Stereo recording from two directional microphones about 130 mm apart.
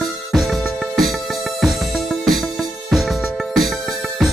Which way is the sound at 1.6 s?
Centre (ahead or behind).